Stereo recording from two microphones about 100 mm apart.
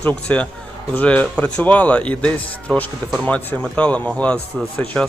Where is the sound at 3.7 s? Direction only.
10° left (ahead or behind).